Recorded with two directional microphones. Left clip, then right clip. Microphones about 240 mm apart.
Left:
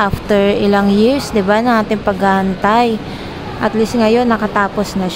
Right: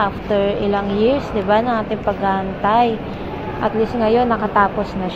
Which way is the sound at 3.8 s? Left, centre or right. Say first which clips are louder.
Left 3 dB; left.